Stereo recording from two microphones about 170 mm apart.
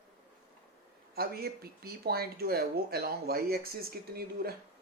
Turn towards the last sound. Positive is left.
turn(degrees=-65)  # may be behind; listen again after turning